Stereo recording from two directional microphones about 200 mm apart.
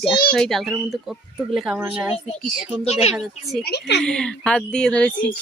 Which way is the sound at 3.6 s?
55° left (ahead or behind).